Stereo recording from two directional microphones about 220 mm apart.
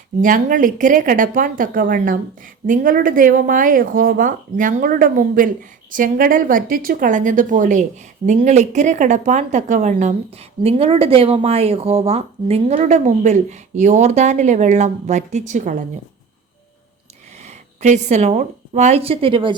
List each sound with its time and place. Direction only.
0.2 s a woman's voice: 35° right (ahead or behind)
17.4 s a woman's voice: 30° right (ahead or behind)